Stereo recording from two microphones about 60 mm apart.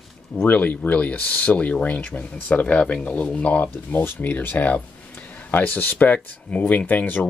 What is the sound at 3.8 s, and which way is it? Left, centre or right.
Speech, left.